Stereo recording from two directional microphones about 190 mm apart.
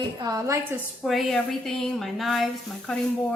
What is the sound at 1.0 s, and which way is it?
A woman's voice, centre (ahead or behind).